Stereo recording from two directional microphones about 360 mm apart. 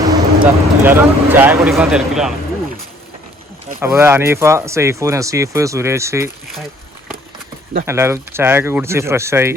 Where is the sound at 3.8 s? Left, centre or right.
Centre.